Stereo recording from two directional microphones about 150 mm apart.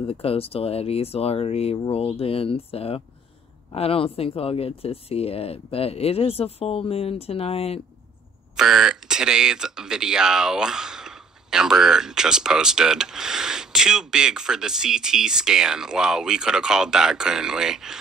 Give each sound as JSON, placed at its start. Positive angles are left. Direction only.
{"t": 0.0, "sound": "speech", "side_deg": 40}
{"t": 8.5, "sound": "speech", "side_deg": -5}